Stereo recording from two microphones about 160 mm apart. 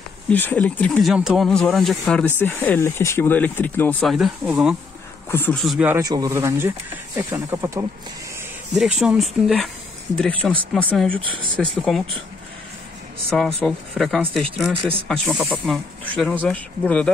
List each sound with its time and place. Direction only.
0.3 s speech: 10° left (ahead or behind)
4.0 s speech: centre (ahead or behind)
5.3 s speech: 15° left (ahead or behind)
5.6 s speech: centre (ahead or behind)
5.9 s speech: 20° right (ahead or behind)
8.7 s speech: 5° right (ahead or behind)
13.3 s speech: 5° left (ahead or behind)